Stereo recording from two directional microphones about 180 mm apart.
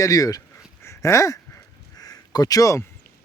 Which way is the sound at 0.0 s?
20° left (ahead or behind).